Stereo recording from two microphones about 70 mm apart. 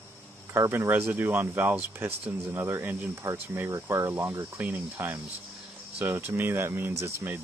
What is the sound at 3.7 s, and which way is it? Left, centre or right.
Speech, right.